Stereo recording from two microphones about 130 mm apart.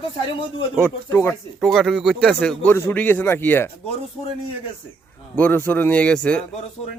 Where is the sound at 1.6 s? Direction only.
Centre (ahead or behind).